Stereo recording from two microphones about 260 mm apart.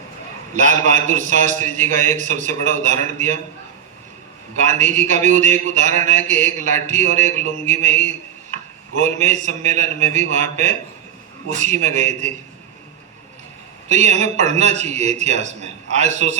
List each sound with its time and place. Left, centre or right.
0.5 s a man's voice: right
4.5 s a man's voice: right
13.8 s a man's voice: right